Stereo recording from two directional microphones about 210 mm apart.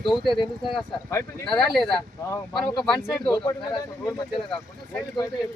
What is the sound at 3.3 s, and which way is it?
Speech, 20° left (ahead or behind).